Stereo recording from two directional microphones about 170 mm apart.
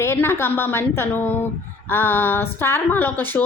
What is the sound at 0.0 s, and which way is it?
A woman's voice, 15° left (ahead or behind).